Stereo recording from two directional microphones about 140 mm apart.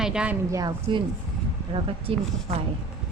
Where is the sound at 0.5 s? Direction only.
30° right (ahead or behind).